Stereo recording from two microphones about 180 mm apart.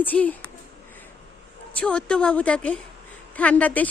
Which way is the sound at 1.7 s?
5° left (ahead or behind).